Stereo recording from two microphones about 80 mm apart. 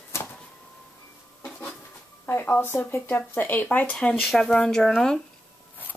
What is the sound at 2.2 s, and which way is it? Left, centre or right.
Speech, left.